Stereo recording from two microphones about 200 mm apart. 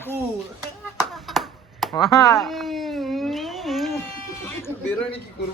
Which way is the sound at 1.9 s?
15° left (ahead or behind).